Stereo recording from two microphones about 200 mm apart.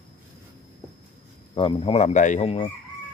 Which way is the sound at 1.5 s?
25° left (ahead or behind).